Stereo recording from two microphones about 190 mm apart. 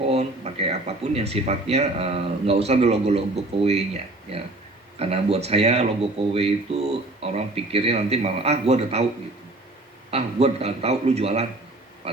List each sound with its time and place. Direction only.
0.0 s speech: 30° right (ahead or behind)
4.9 s speech: 30° right (ahead or behind)
10.1 s speech: 30° right (ahead or behind)
12.0 s pig: 30° right (ahead or behind)